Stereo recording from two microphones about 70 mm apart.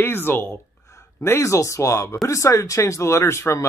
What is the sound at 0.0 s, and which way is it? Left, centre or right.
Speech, left.